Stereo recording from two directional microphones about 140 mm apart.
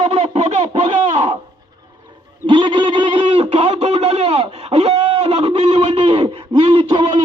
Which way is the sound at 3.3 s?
45° right (ahead or behind).